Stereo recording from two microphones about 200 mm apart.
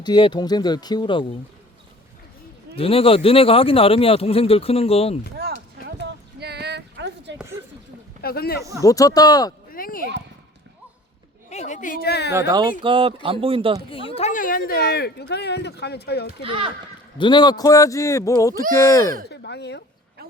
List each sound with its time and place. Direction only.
0.0 s speech: 20° left (ahead or behind)
2.7 s speech: 30° left (ahead or behind)
6.1 s a sound: 55° right (ahead or behind)
8.2 s speech: 50° left (ahead or behind)
8.8 s speech: 15° left (ahead or behind)
9.7 s speech: 45° left (ahead or behind)
11.4 s a woman's voice: 35° left (ahead or behind); by 12.3 s 55° left (ahead or behind)
12.3 s speech: 15° right (ahead or behind)
13.9 s speech: 25° left (ahead or behind); by 16.3 s 55° left (ahead or behind)
17.2 s speech: 20° left (ahead or behind)
19.3 s speech: 55° left (ahead or behind)